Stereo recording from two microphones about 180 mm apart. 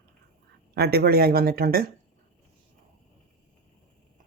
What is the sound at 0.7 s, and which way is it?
Speech, 60° right (ahead or behind).